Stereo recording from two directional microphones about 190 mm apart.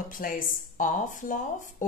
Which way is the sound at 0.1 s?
45° left (ahead or behind).